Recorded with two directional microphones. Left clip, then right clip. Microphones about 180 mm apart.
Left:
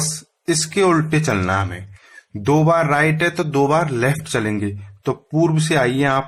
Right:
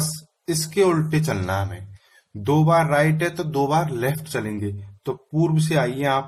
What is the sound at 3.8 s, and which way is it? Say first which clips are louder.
Speech: left 5 dB; 20° left (ahead or behind).